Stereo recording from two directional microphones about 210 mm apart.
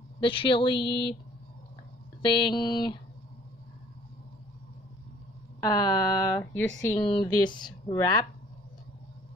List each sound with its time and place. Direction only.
0.2 s speech: 25° left (ahead or behind)
2.2 s speech: 20° left (ahead or behind)
5.6 s speech: 20° left (ahead or behind)